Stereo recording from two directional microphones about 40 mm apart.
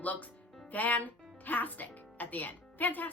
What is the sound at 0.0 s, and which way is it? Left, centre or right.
Speech, left.